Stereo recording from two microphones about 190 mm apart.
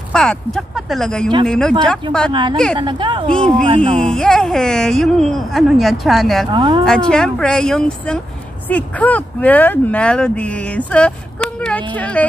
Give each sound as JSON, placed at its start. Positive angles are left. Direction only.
{"t": 0.1, "sound": "speech", "side_deg": 5}
{"t": 2.5, "sound": "speech", "side_deg": 5}
{"t": 2.8, "sound": "speech", "side_deg": -25}
{"t": 3.3, "sound": "speech", "side_deg": 5}
{"t": 3.6, "sound": "speech", "side_deg": -25}
{"t": 3.9, "sound": "speech", "side_deg": 5}
{"t": 6.5, "sound": "speech", "side_deg": -20}
{"t": 6.8, "sound": "speech", "side_deg": 5}